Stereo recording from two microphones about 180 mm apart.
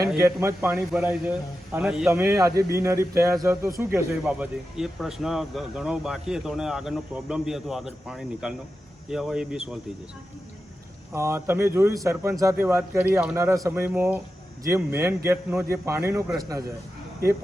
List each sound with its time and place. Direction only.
0.2 s a man's voice: 15° right (ahead or behind)
11.1 s a man's voice: 15° right (ahead or behind)